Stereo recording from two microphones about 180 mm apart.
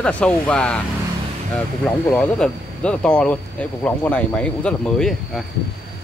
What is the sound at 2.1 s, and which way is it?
Speech, 5° left (ahead or behind).